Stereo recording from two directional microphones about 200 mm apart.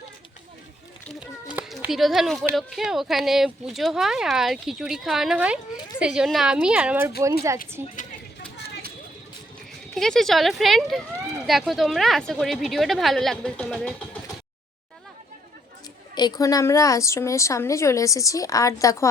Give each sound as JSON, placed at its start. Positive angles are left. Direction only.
{"t": 1.0, "sound": "a child's voice", "side_deg": -5}
{"t": 9.9, "sound": "speech", "side_deg": 0}
{"t": 16.1, "sound": "a woman's voice", "side_deg": 20}